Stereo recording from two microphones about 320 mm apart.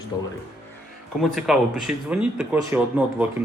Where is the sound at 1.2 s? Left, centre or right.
Centre.